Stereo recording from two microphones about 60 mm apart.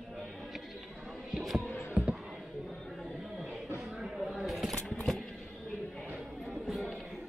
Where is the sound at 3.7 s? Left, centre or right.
Centre.